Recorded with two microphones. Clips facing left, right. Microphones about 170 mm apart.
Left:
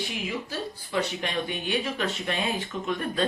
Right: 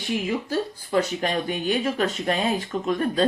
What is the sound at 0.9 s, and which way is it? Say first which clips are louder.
Speech: right 6 dB; 45° right (ahead or behind).